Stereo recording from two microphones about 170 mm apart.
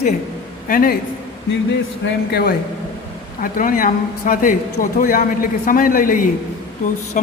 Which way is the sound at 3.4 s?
55° left (ahead or behind).